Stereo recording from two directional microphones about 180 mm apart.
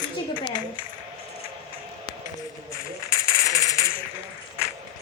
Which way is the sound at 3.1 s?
20° left (ahead or behind).